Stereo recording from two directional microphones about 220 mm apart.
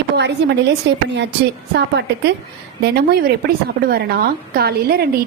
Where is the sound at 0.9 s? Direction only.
55° right (ahead or behind).